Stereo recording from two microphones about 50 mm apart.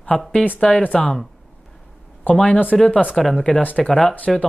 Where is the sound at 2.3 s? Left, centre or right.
Left.